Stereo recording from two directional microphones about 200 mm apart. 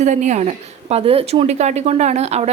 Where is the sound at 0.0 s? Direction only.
35° right (ahead or behind).